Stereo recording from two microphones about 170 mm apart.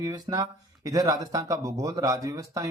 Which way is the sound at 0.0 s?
20° right (ahead or behind).